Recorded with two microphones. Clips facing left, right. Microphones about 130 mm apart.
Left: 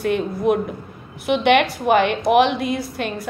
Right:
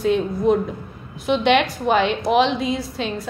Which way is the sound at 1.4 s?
60° left (ahead or behind).